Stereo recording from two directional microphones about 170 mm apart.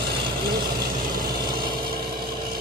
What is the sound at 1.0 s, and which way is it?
Vehicle, 55° right (ahead or behind).